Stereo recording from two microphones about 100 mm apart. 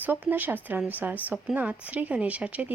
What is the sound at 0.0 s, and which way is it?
Speech, 20° right (ahead or behind).